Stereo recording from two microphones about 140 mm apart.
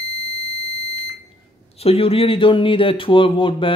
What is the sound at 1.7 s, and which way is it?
Speech, 45° left (ahead or behind).